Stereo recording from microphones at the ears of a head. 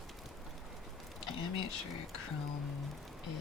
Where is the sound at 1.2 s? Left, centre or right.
Left.